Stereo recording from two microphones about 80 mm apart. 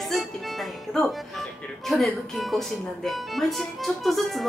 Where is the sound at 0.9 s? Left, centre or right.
Centre.